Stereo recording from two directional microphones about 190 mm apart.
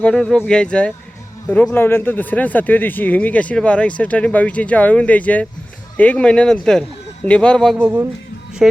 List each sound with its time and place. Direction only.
0.0 s speech: centre (ahead or behind)
7.8 s speech: 5° right (ahead or behind)